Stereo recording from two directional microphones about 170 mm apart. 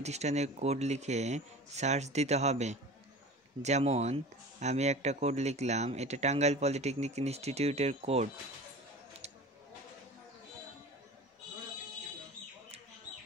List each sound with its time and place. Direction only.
0.0 s speech: 40° right (ahead or behind)